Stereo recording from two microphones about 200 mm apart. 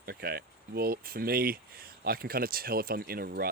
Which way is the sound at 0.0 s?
50° right (ahead or behind).